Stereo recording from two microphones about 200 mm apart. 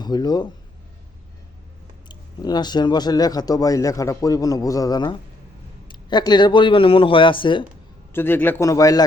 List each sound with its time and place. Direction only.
0.0 s speech: 20° left (ahead or behind)
2.0 s speech: 20° left (ahead or behind)
8.1 s a man's voice: 10° left (ahead or behind)